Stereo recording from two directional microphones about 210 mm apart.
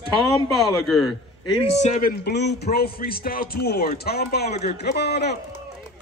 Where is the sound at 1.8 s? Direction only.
35° left (ahead or behind).